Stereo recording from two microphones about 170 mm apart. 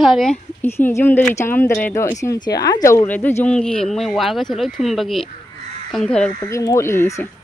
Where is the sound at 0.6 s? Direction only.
15° left (ahead or behind).